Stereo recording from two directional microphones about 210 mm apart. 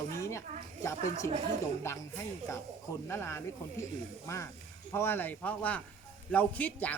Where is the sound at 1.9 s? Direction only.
15° left (ahead or behind).